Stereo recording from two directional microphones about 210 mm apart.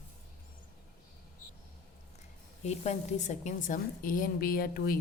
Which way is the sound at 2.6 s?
30° left (ahead or behind).